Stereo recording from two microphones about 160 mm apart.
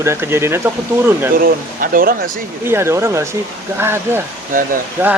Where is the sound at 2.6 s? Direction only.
15° right (ahead or behind).